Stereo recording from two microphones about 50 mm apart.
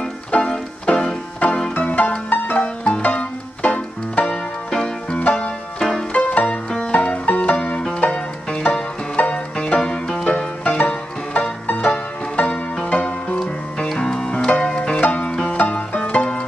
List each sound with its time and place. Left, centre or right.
0.3 s music: left
1.8 s music: left
2.6 s music: left
4.3 s music: centre
5.8 s music: centre
6.1 s music: left
9.6 s music: centre
12.9 s music: left
13.4 s music: centre